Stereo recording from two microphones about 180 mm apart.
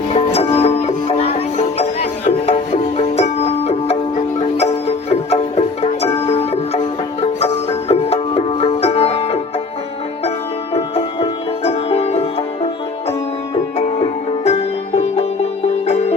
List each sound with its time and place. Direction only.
0.1 s music: 35° left (ahead or behind)
10.8 s music: 35° left (ahead or behind)
13.7 s music: 35° left (ahead or behind)